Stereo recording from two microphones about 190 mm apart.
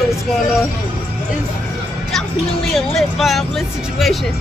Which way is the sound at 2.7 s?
Centre (ahead or behind).